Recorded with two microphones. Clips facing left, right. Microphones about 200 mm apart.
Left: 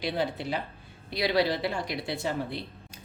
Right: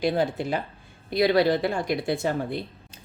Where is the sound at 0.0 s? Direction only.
50° right (ahead or behind).